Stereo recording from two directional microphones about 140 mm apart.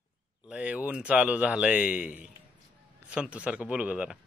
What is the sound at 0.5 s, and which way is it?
Speech, 10° right (ahead or behind).